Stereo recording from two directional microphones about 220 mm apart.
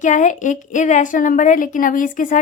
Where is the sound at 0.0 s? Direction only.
35° left (ahead or behind).